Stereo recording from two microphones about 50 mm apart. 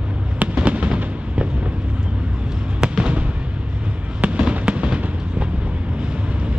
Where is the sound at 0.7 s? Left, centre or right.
Right.